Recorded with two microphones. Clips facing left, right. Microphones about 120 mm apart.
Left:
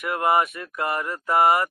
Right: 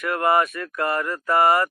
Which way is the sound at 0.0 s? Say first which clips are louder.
Right 1 dB; 20° left (ahead or behind).